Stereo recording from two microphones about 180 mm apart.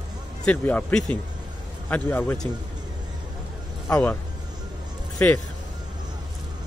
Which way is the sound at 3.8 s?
15° left (ahead or behind).